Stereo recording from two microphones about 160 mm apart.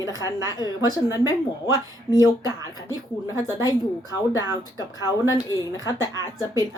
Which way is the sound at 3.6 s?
20° left (ahead or behind).